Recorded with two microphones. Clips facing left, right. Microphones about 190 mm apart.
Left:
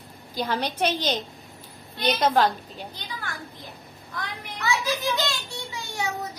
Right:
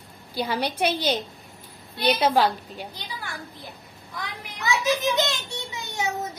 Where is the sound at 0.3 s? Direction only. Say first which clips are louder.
Right 1 dB; 10° right (ahead or behind).